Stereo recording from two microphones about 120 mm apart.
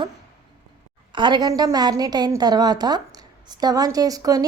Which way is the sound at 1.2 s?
40° right (ahead or behind).